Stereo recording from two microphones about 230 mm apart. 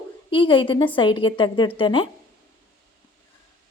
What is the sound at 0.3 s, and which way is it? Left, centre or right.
Speech, left.